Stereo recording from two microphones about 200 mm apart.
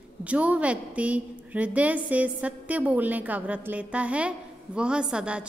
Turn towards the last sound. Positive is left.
turn(degrees=-5)  # may be behind; listen again after turning